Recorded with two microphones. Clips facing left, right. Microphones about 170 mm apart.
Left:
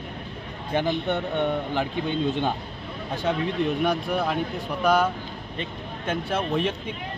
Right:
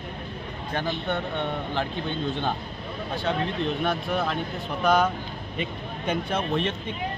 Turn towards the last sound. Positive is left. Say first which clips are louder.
# left 1 dB
turn(degrees=10)  # may be behind; listen again after turning